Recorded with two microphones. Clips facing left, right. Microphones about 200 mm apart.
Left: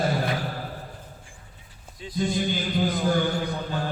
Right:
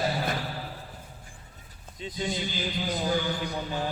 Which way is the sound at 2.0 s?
20° right (ahead or behind).